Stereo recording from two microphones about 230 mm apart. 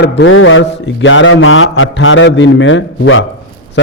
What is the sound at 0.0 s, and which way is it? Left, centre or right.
A man's voice, left.